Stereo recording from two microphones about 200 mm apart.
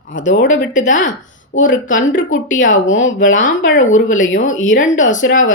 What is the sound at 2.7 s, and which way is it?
Speech, 70° left (ahead or behind).